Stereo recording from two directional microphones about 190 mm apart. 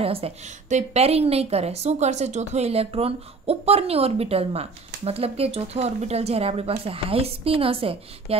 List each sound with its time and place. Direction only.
0.0 s a woman's voice: 30° right (ahead or behind)